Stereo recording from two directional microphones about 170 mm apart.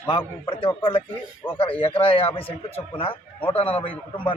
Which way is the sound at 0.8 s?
30° left (ahead or behind).